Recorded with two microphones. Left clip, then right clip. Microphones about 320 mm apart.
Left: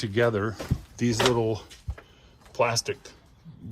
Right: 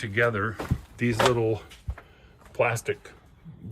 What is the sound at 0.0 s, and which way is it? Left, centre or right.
Speech, centre.